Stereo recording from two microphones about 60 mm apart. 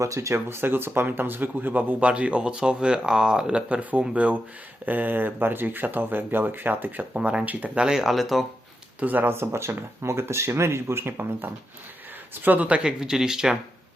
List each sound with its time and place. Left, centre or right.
0.0 s speech: right
7.1 s speech: centre
7.8 s speech: centre
9.0 s speech: right; by 13.6 s centre